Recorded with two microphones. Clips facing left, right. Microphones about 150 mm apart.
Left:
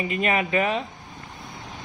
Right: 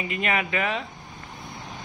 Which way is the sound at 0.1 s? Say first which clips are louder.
Left 3 dB; 35° left (ahead or behind).